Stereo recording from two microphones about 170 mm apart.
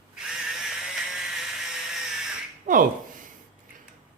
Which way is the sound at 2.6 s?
50° right (ahead or behind).